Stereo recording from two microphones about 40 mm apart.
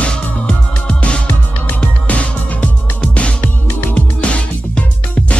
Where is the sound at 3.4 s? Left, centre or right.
Left.